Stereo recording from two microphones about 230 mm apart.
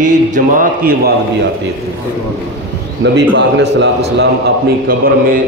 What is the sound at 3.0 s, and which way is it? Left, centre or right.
A man's voice, right.